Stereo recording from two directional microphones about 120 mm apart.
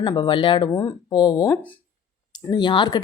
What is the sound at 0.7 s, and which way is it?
A woman's voice, 30° left (ahead or behind).